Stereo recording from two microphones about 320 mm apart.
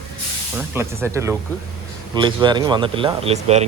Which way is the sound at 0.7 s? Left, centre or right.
Centre.